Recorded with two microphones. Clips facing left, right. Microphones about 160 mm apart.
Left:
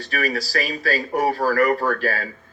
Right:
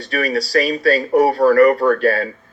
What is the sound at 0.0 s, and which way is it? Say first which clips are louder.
A man's voice: right 5 dB; 30° right (ahead or behind).